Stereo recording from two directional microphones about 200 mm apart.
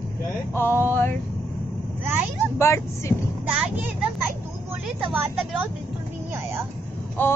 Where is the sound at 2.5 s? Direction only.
15° left (ahead or behind).